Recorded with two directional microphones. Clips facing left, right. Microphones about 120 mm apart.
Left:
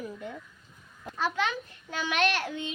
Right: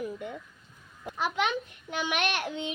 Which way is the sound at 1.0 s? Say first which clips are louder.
Even; 15° right (ahead or behind).